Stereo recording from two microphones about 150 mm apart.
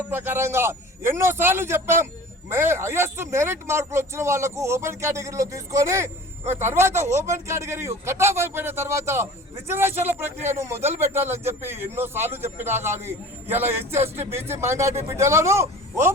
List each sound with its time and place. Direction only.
0.1 s a man's voice: 15° right (ahead or behind)